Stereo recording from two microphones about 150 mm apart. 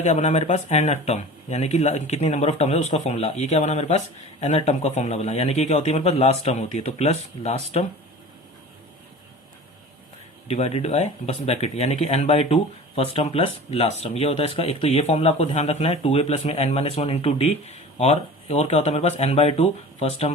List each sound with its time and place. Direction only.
0.0 s speech: 50° left (ahead or behind)
10.5 s speech: 45° left (ahead or behind)